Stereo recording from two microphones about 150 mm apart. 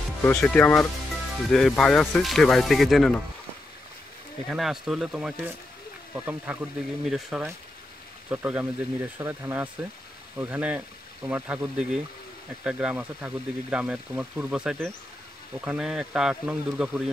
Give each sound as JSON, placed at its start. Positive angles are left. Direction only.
{"t": 0.2, "sound": "speech", "side_deg": 10}
{"t": 4.5, "sound": "speech", "side_deg": 0}